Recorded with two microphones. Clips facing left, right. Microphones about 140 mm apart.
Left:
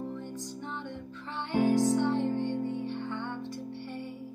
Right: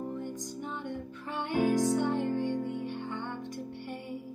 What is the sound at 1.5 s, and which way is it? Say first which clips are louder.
Music: left 2 dB; 15° right (ahead or behind).